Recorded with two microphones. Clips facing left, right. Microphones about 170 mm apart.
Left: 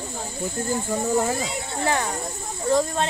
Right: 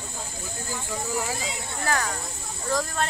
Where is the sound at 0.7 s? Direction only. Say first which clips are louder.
Left 7 dB; 45° left (ahead or behind).